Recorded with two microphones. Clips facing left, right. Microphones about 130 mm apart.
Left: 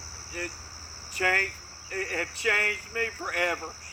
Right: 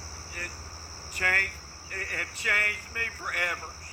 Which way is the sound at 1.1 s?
20° left (ahead or behind).